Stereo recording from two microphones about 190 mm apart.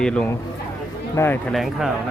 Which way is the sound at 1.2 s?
15° left (ahead or behind).